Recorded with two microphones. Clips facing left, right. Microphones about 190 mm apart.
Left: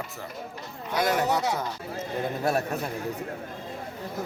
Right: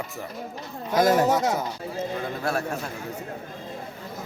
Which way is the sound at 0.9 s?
40° right (ahead or behind).